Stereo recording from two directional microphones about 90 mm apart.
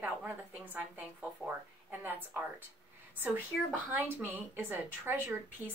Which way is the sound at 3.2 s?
20° right (ahead or behind).